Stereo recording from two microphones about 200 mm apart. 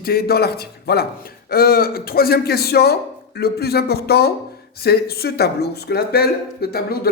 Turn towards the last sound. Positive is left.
turn(degrees=50)  # may be behind; listen again after turning